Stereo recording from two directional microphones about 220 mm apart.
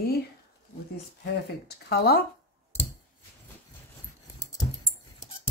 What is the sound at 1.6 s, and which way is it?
Speech, 45° left (ahead or behind).